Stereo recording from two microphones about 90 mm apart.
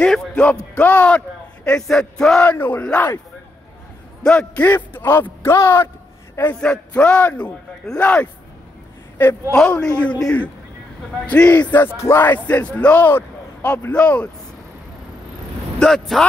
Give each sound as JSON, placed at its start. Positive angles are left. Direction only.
{"t": 0.0, "sound": "speech", "side_deg": 15}
{"t": 2.4, "sound": "a man's voice", "side_deg": 20}
{"t": 4.2, "sound": "a man's voice", "side_deg": 10}
{"t": 6.5, "sound": "speech", "side_deg": 10}
{"t": 9.5, "sound": "speech", "side_deg": 10}
{"t": 12.0, "sound": "speech", "side_deg": 30}
{"t": 15.8, "sound": "speech", "side_deg": 5}